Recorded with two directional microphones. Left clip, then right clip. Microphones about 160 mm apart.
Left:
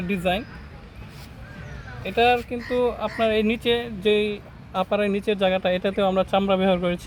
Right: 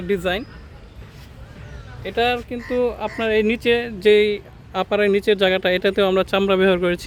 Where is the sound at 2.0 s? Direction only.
45° right (ahead or behind).